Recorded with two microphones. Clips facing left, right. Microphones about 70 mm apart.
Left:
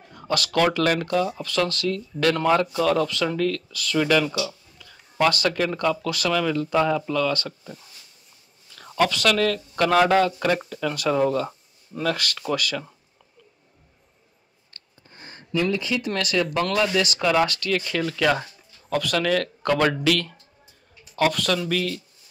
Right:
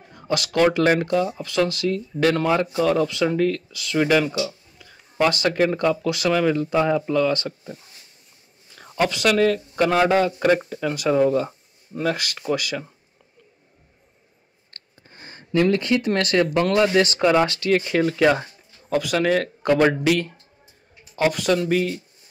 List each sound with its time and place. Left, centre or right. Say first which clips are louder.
0.0 s speech: right 1 dB; centre
15.1 s a sound: right 1 dB; centre
15.7 s speech: right 5 dB; right
16.5 s speech: right 5 dB; right